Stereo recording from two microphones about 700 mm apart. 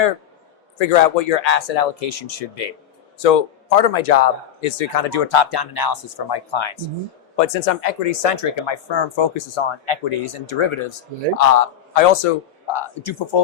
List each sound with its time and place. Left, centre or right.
0.8 s speech: left
7.3 s speech: left
8.2 s speech: left
11.3 s a man's voice: left